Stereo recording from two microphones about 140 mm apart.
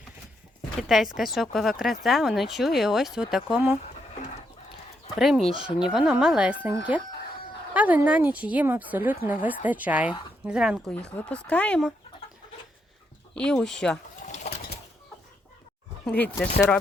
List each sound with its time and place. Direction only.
0.8 s speech: centre (ahead or behind)
5.1 s speech: centre (ahead or behind)
10.9 s speech: 10° left (ahead or behind)
13.3 s speech: 5° left (ahead or behind)
14.2 s bird: 60° left (ahead or behind)
16.0 s speech: 10° left (ahead or behind)